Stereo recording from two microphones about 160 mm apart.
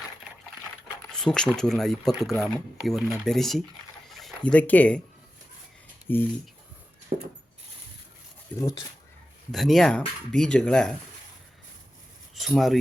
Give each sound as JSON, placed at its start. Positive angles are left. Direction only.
{"t": 1.1, "sound": "speech", "side_deg": 5}
{"t": 6.1, "sound": "speech", "side_deg": 15}
{"t": 7.1, "sound": "wood", "side_deg": -45}
{"t": 8.5, "sound": "speech", "side_deg": 20}
{"t": 9.5, "sound": "speech", "side_deg": 0}
{"t": 12.3, "sound": "speech", "side_deg": 0}